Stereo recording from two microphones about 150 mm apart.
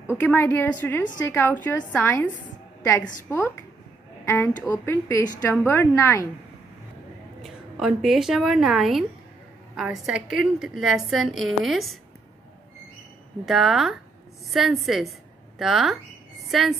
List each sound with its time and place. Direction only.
0.0 s a woman's voice: 15° left (ahead or behind)
4.3 s a woman's voice: 15° left (ahead or behind)
7.4 s a woman's voice: centre (ahead or behind)
13.5 s a woman's voice: 5° right (ahead or behind)